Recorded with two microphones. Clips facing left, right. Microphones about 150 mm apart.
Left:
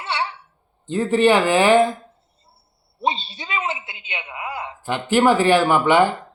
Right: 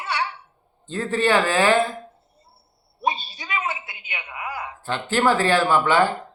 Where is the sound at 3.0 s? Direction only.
25° left (ahead or behind).